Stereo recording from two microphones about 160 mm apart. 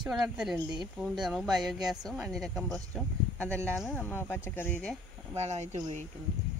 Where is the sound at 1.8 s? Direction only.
25° right (ahead or behind).